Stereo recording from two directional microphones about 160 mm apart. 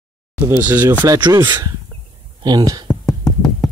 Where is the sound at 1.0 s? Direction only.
20° right (ahead or behind).